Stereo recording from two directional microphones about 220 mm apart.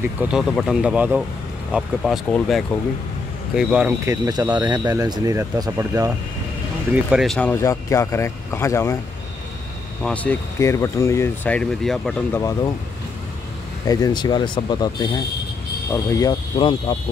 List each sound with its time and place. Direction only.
0.2 s speech: centre (ahead or behind)
7.1 s speech: centre (ahead or behind)
10.0 s speech: 5° left (ahead or behind)
13.8 s speech: 15° left (ahead or behind)